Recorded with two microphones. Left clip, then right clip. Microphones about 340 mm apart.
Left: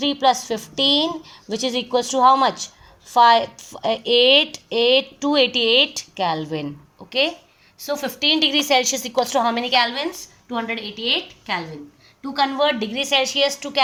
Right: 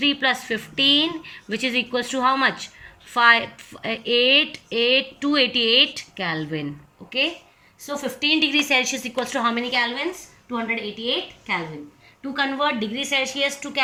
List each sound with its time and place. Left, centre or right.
0.0 s a woman's voice: left